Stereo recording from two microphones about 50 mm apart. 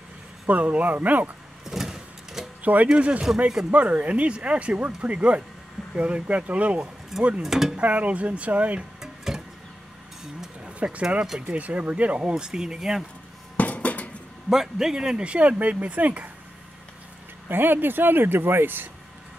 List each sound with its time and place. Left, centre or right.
0.5 s speech: right
1.7 s vehicle: centre
2.6 s speech: right
7.1 s speech: centre
7.7 s speech: right
9.0 s music: centre
10.6 s speech: right
11.5 s speech: right; by 13.0 s centre
13.6 s a sound: left
14.5 s speech: centre; by 16.3 s right
17.5 s speech: right